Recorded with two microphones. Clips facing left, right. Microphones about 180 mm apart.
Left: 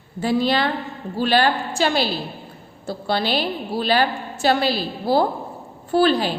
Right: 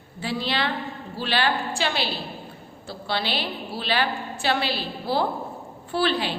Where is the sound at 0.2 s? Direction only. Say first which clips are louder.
Left 7 dB; 45° left (ahead or behind).